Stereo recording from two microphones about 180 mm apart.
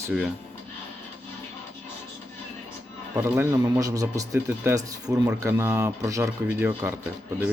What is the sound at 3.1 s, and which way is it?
A man's voice, 15° right (ahead or behind).